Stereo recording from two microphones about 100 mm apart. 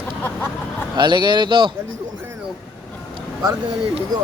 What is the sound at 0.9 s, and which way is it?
Speech, 50° right (ahead or behind).